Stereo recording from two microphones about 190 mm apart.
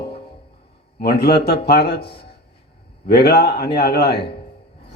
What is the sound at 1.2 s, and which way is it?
Speech, 55° left (ahead or behind).